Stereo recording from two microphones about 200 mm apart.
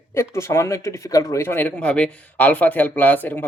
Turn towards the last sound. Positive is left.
turn(degrees=10)  # may be behind; listen again after turning